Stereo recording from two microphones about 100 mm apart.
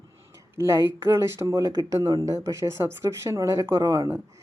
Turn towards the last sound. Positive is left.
turn(degrees=-30)  # may be behind; listen again after turning